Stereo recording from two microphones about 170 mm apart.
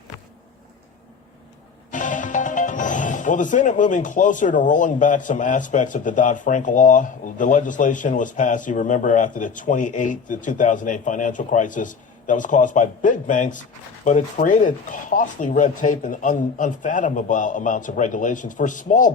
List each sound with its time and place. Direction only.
1.9 s speech: 50° left (ahead or behind)